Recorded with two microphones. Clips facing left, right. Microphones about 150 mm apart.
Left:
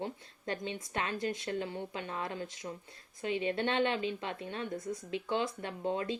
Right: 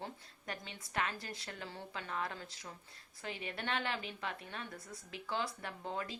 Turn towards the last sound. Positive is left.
turn(degrees=25)  # may be behind; listen again after turning